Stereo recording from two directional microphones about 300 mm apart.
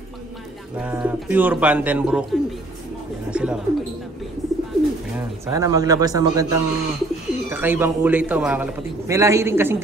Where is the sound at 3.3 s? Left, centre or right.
Centre.